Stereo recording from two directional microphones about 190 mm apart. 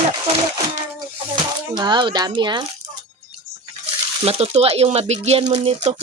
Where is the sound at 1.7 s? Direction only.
25° right (ahead or behind).